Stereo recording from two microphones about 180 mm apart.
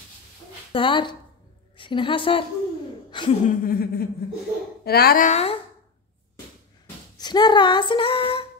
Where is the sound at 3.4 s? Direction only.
55° left (ahead or behind); by 5.6 s 35° left (ahead or behind).